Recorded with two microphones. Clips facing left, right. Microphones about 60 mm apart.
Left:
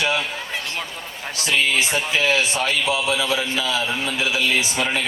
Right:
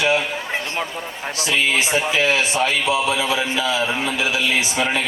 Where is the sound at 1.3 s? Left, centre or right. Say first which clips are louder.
Right 1 dB; right.